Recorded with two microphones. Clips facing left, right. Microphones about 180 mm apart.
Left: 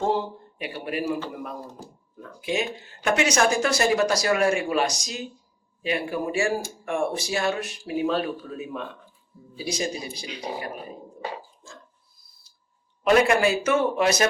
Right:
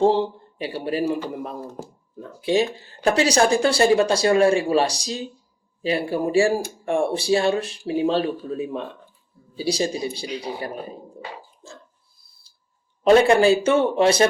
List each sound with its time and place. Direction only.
0.0 s speech: 30° right (ahead or behind)
2.2 s speech: 30° right (ahead or behind)
13.1 s speech: 30° right (ahead or behind)